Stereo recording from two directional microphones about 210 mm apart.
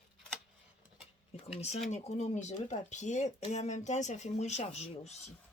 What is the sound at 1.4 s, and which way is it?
Speech, 30° left (ahead or behind).